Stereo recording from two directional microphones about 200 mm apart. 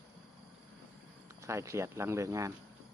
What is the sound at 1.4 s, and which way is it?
Speech, 15° right (ahead or behind).